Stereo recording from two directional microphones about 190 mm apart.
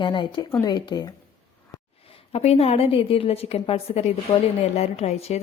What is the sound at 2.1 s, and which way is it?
A woman's voice, 30° left (ahead or behind).